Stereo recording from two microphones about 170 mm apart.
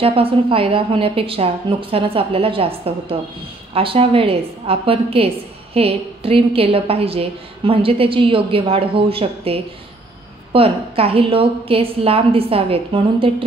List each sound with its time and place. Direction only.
0.0 s a woman's voice: 35° right (ahead or behind)